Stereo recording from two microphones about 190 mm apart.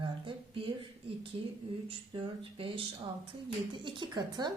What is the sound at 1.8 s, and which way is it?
Speech, 25° right (ahead or behind).